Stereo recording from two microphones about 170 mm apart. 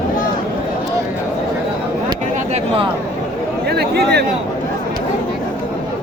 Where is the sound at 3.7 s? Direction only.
75° right (ahead or behind).